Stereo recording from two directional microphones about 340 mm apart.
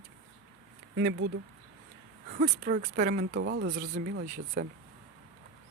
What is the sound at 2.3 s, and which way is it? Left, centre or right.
A woman's voice, right.